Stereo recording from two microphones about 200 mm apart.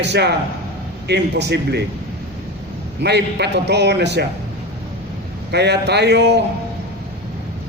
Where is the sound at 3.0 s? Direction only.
55° right (ahead or behind).